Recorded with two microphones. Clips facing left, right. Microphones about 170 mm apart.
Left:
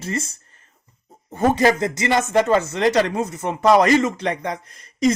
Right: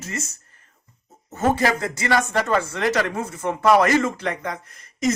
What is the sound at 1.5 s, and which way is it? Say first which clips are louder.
Speech: left 3 dB; 25° left (ahead or behind).